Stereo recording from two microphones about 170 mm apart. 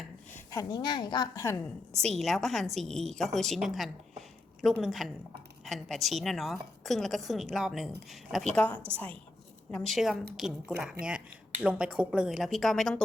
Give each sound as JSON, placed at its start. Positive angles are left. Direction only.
{"t": 0.3, "sound": "a woman's voice", "side_deg": 20}
{"t": 2.1, "sound": "a woman's voice", "side_deg": 0}